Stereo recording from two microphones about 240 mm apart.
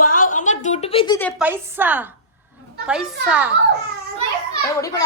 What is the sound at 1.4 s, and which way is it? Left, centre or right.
A woman's voice, centre.